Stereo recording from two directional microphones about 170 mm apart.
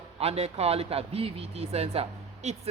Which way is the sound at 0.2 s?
40° right (ahead or behind).